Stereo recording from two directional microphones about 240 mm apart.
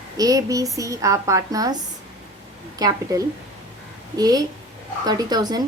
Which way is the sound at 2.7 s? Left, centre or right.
Centre.